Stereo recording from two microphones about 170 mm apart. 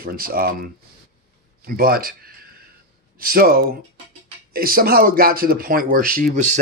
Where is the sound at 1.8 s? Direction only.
60° right (ahead or behind).